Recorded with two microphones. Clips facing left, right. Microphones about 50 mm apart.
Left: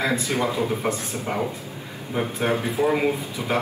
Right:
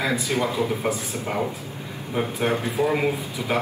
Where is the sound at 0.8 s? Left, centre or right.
Centre.